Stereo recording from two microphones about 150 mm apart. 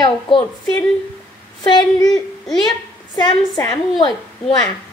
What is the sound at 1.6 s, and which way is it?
A woman's voice, 30° left (ahead or behind).